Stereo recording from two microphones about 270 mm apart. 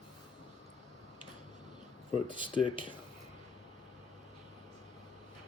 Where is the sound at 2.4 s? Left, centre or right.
Centre.